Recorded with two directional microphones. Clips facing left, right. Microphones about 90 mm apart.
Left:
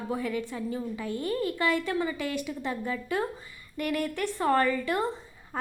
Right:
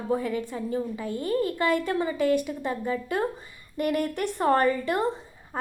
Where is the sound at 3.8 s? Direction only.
45° right (ahead or behind).